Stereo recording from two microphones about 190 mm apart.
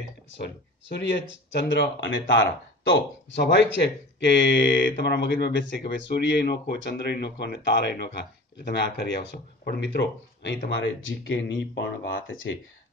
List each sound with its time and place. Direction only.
0.4 s speech: 60° left (ahead or behind)
10.8 s speech: 90° left